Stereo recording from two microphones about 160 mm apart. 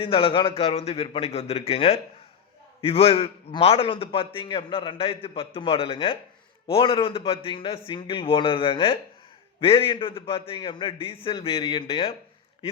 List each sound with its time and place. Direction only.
0.0 s a man's voice: 35° left (ahead or behind)